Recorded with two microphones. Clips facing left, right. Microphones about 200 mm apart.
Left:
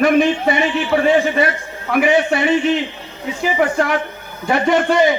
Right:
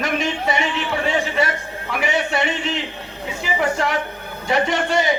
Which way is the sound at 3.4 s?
55° left (ahead or behind).